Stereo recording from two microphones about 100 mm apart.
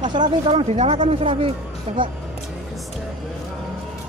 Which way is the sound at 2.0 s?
55° right (ahead or behind).